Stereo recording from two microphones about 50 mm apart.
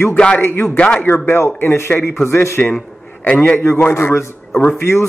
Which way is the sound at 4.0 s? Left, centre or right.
Left.